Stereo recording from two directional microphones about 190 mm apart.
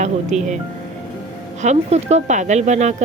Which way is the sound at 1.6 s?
35° right (ahead or behind).